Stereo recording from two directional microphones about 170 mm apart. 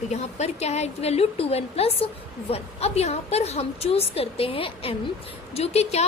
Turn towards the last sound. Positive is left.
turn(degrees=40)  # may be behind; listen again after turning